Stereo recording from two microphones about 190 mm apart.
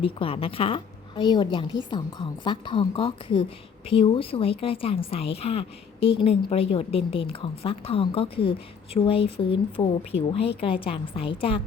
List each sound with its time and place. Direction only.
0.0 s a woman's voice: 30° left (ahead or behind)